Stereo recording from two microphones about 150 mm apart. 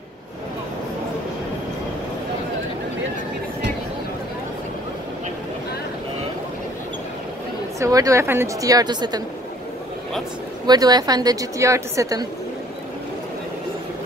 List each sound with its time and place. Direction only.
7.8 s a woman's voice: 20° right (ahead or behind)
10.7 s a woman's voice: 25° right (ahead or behind)